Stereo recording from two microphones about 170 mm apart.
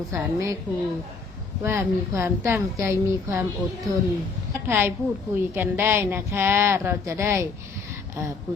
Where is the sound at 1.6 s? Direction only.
15° right (ahead or behind).